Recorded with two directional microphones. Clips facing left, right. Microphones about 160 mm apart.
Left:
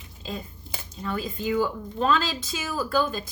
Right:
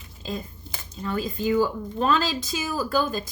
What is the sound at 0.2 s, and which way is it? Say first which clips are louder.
A woman's voice: right 3 dB; 40° right (ahead or behind).